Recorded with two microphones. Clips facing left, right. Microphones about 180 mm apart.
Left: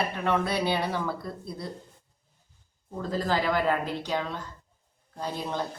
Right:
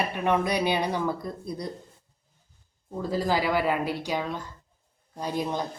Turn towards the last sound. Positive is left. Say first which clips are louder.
# right 3 dB
turn(degrees=-15)  # may be behind; listen again after turning